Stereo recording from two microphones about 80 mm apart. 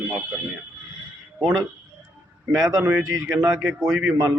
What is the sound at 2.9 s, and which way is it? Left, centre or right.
Speech, centre.